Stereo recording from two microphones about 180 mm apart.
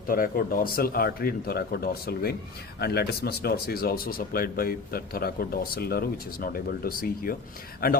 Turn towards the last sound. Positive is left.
turn(degrees=55)  # may be behind; listen again after turning